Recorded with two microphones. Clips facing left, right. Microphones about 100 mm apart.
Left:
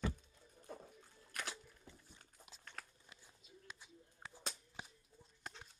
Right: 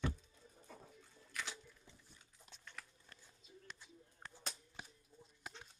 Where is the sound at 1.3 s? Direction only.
50° left (ahead or behind).